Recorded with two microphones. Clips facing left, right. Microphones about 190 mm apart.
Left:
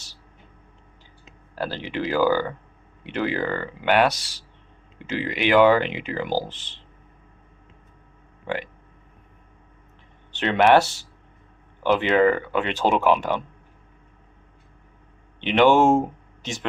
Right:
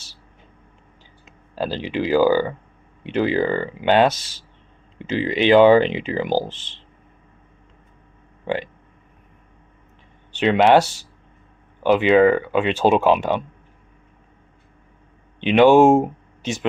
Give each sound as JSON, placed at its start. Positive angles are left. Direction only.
{"t": 1.5, "sound": "speech", "side_deg": -15}
{"t": 10.3, "sound": "speech", "side_deg": -15}
{"t": 15.4, "sound": "speech", "side_deg": -15}